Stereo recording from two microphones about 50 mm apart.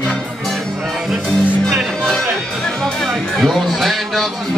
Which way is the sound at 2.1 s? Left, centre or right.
Centre.